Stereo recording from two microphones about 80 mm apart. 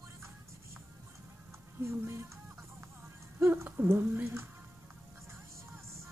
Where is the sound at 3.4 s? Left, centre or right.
Right.